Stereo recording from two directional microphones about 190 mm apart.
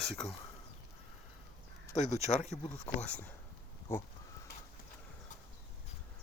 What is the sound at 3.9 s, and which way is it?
Speech, 15° left (ahead or behind).